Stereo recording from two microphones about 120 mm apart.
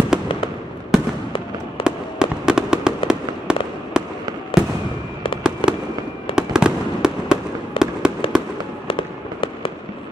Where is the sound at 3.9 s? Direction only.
5° right (ahead or behind).